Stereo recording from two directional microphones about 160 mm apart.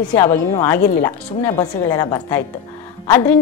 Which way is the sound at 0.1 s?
20° left (ahead or behind).